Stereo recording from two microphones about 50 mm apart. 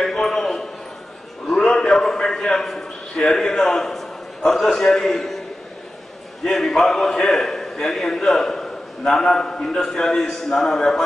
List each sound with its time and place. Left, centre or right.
0.0 s a sound: centre
3.2 s a man's voice: centre
3.5 s a man's voice: left
3.8 s a sound: centre
4.8 s a man's voice: left
5.1 s a man's voice: centre
6.4 s a man's voice: centre